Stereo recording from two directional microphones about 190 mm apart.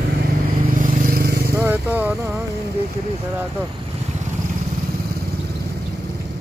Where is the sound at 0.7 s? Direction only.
45° right (ahead or behind).